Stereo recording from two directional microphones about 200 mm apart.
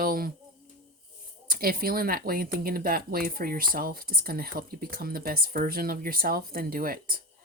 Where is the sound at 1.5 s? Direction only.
45° right (ahead or behind).